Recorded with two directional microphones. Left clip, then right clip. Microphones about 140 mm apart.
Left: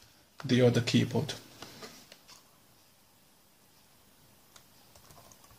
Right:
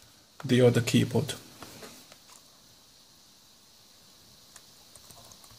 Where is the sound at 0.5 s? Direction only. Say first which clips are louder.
Right 3 dB; 15° right (ahead or behind).